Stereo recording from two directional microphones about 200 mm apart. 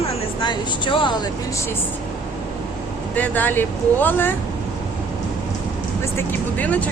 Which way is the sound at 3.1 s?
10° left (ahead or behind).